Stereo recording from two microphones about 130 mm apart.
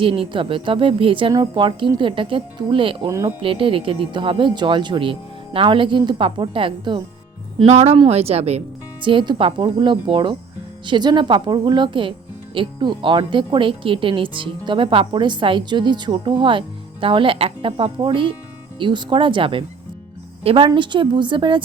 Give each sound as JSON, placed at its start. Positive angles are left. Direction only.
{"t": 0.0, "sound": "speech", "side_deg": -45}
{"t": 3.1, "sound": "speech", "side_deg": -25}
{"t": 3.4, "sound": "speech", "side_deg": -45}
{"t": 7.7, "sound": "speech", "side_deg": -60}
{"t": 7.9, "sound": "speech", "side_deg": -50}
{"t": 9.0, "sound": "a woman's voice", "side_deg": -40}